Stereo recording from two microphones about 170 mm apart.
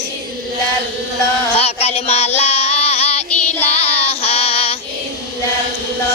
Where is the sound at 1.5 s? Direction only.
40° left (ahead or behind).